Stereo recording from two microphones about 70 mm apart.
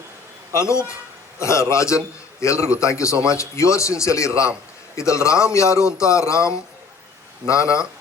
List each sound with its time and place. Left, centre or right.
0.5 s a man's voice: left